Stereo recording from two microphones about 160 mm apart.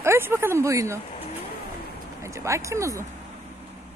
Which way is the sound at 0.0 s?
15° right (ahead or behind).